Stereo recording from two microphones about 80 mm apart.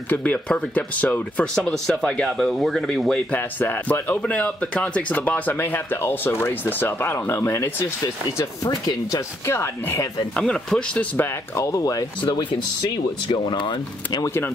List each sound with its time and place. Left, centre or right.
0.1 s speech: centre
3.3 s speech: left
4.2 s speech: centre; by 8.5 s left
8.6 s speech: left
9.5 s speech: left
10.3 s speech: centre
11.5 s speech: left
12.2 s speech: left